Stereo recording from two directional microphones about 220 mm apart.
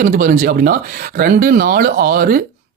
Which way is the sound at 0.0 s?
40° right (ahead or behind).